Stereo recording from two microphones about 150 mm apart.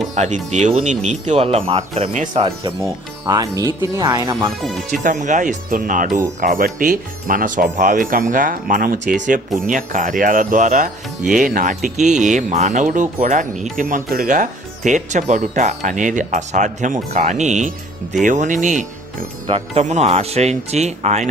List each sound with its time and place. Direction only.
0.1 s speech: 50° right (ahead or behind)
3.2 s speech: 25° right (ahead or behind)
4.9 s speech: 55° right (ahead or behind)
19.5 s speech: 40° right (ahead or behind)